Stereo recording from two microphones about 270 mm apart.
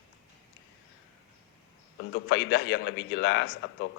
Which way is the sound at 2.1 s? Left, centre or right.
Left.